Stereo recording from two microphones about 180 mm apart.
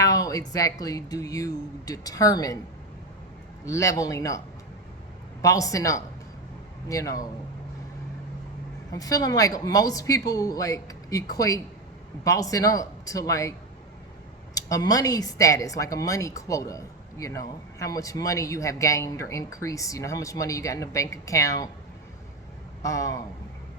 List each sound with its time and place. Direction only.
0.0 s a woman's voice: 20° left (ahead or behind)
3.7 s speech: 15° left (ahead or behind)
5.4 s speech: 20° left (ahead or behind)
8.9 s a woman's voice: 20° left (ahead or behind)
14.5 s speech: 20° left (ahead or behind)
22.8 s speech: 15° left (ahead or behind)